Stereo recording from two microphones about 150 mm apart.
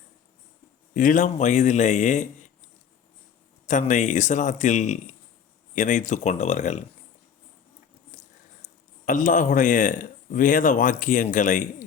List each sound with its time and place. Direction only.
0.9 s speech: 60° left (ahead or behind)
3.7 s speech: 55° left (ahead or behind)
8.6 s speech: 60° left (ahead or behind)